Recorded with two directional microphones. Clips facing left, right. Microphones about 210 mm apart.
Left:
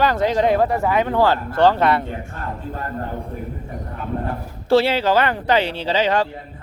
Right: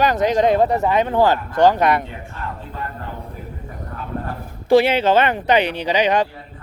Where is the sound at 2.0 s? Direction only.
45° left (ahead or behind).